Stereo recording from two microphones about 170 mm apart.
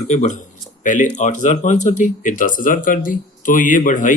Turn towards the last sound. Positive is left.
turn(degrees=50)  # may be behind; listen again after turning